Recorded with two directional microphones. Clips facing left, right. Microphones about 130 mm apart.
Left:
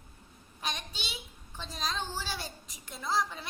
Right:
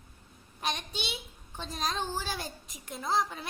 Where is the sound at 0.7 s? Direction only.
55° right (ahead or behind).